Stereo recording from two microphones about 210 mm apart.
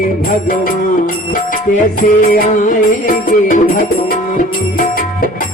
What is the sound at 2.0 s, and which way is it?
Music, 40° left (ahead or behind).